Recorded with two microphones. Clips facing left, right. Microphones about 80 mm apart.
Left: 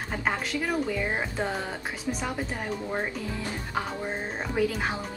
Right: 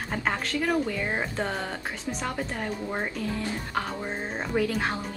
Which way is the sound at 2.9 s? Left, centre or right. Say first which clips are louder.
Right 1 dB; centre.